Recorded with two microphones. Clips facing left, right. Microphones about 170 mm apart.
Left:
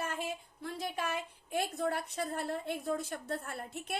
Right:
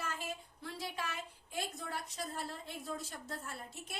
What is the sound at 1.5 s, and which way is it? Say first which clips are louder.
A woman's voice: left 9 dB; 60° left (ahead or behind).